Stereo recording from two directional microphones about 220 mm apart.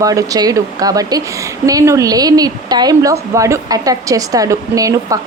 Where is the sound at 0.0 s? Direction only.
15° right (ahead or behind).